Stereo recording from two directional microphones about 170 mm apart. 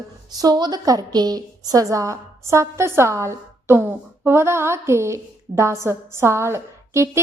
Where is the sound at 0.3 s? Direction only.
25° right (ahead or behind).